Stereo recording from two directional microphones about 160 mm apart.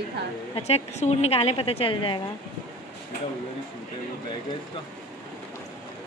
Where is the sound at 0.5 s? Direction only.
40° left (ahead or behind).